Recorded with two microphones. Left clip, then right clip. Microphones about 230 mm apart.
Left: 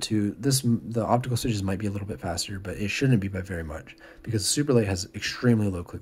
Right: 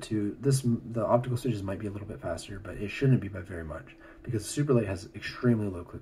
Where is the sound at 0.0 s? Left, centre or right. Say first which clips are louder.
Left 3 dB; left.